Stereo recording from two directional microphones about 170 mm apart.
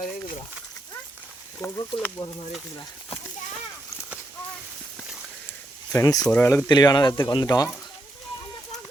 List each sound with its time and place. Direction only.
1.6 s speech: 20° left (ahead or behind)
2.0 s speech: 10° left (ahead or behind)
5.9 s speech: 20° left (ahead or behind)
6.7 s speech: 25° left (ahead or behind)